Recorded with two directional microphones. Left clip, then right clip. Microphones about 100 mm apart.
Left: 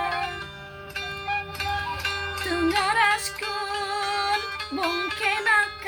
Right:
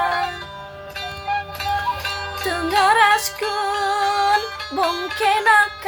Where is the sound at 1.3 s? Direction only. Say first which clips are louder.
Right 6 dB; 40° right (ahead or behind).